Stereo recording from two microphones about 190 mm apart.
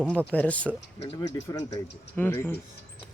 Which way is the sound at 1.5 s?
20° left (ahead or behind).